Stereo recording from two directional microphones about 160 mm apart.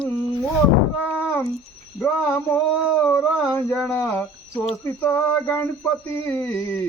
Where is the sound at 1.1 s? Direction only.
15° left (ahead or behind).